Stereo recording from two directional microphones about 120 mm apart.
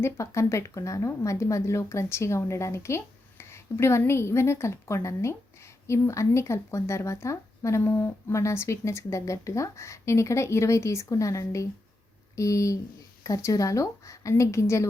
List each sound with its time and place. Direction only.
0.0 s a woman's voice: 25° left (ahead or behind)